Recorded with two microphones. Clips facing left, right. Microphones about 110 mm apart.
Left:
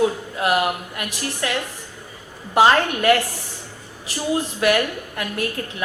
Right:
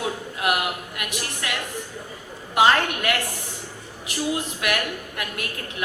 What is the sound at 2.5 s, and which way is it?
Speech, 35° left (ahead or behind).